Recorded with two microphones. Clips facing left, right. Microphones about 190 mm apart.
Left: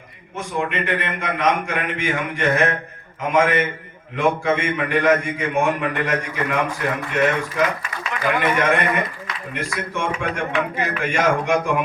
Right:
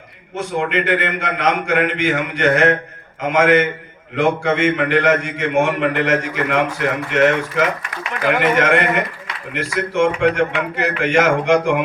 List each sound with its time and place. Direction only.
0.3 s a man's voice: 85° right
3.2 s a man's voice: 90° right
8.3 s a man's voice: 90° right